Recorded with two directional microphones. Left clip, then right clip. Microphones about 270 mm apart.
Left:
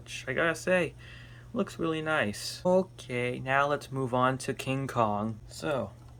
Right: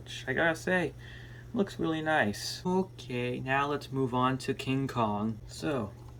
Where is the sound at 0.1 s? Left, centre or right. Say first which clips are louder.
Even; centre.